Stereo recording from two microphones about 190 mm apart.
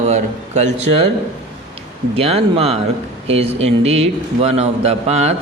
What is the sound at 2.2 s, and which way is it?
Speech, 30° right (ahead or behind).